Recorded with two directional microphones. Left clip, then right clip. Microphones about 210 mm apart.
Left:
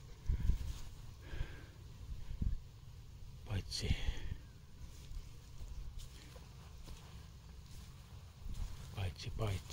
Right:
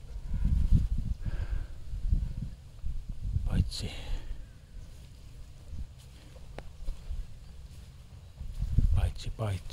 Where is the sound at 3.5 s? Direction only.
20° right (ahead or behind).